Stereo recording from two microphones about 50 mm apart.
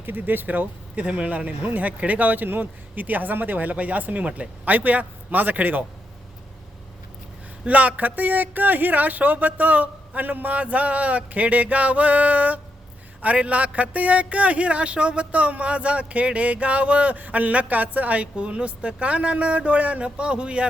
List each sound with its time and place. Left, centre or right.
0.0 s a man's voice: right
7.6 s a man's voice: right